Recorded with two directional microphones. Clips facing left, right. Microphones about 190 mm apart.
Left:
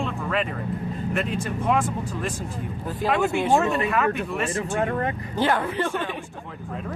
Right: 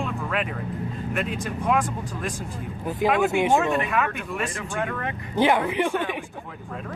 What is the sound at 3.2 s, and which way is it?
Speech, 15° right (ahead or behind).